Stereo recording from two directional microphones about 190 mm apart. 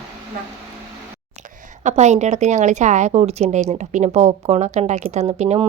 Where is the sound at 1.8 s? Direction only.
40° right (ahead or behind).